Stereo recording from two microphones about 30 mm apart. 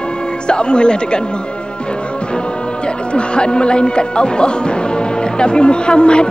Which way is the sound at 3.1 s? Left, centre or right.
Left.